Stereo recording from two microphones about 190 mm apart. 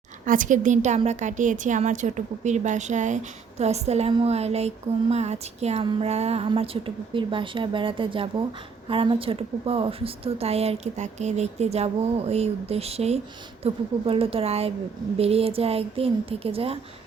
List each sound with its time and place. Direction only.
0.3 s speech: 45° right (ahead or behind)